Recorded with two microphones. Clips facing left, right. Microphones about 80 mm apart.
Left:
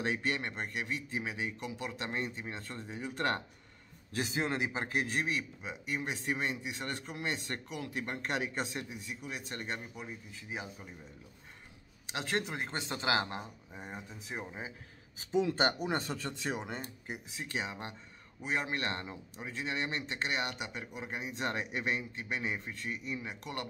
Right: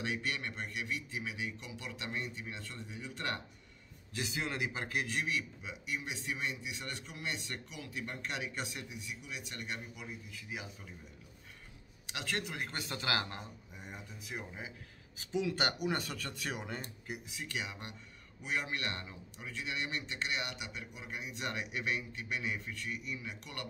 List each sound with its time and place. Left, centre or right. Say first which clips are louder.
0.0 s a man's voice: left 4 dB; left
12.1 s a man's voice: left 4 dB; left